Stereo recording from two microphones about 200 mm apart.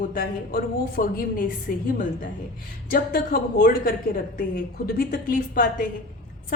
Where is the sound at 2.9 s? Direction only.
45° left (ahead or behind).